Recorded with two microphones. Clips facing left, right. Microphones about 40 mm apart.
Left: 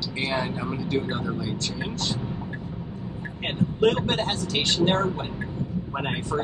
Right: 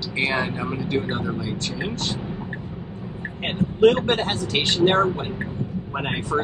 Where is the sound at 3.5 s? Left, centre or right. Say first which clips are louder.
Right 5 dB; right.